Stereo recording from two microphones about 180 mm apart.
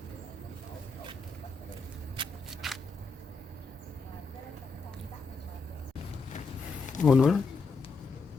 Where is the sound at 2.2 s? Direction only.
25° right (ahead or behind).